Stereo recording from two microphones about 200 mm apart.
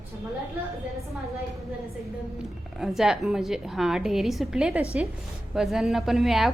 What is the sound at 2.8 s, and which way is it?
A woman's voice, centre (ahead or behind).